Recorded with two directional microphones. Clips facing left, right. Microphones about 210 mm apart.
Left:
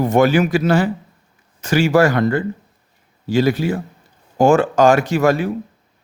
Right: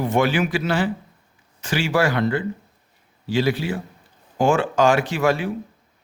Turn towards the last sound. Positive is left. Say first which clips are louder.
# left 5 dB
turn(degrees=40)  # may be behind; listen again after turning